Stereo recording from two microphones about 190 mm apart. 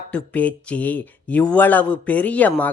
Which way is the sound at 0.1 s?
5° left (ahead or behind).